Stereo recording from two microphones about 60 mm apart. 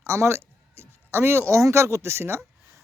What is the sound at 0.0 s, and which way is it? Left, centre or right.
Speech, right.